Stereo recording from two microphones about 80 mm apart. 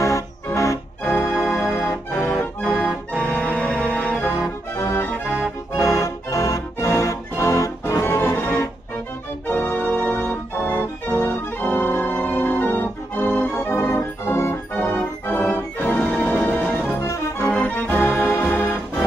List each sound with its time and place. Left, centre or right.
0.0 s organ: left
1.3 s organ: centre
1.6 s organ: left
2.1 s accordion: centre
3.1 s music: centre
4.4 s music: left
4.9 s music: left
5.8 s music: left
9.5 s organ: left
13.5 s organ: left
14.7 s music: left
17.0 s music: left
17.5 s organ: centre